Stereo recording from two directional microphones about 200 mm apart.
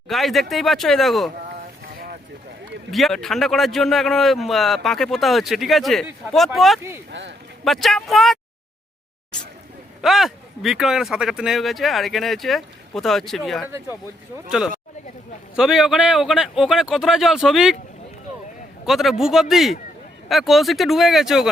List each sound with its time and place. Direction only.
0.1 s a man's voice: centre (ahead or behind)
2.9 s a man's voice: centre (ahead or behind)
7.1 s speech: 60° right (ahead or behind)
7.6 s a man's voice: centre (ahead or behind)
10.0 s a man's voice: centre (ahead or behind)
15.5 s a man's voice: centre (ahead or behind)
18.9 s a man's voice: centre (ahead or behind)